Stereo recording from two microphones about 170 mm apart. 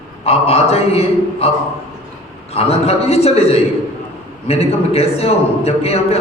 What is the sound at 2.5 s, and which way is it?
A man's voice, 35° left (ahead or behind).